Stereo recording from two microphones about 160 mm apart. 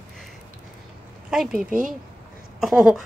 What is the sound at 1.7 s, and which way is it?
Speech, 55° right (ahead or behind).